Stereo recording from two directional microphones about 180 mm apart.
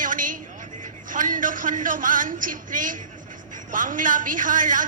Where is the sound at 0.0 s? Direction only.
50° right (ahead or behind).